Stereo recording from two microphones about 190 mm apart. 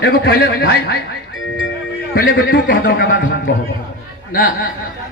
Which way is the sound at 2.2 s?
55° left (ahead or behind).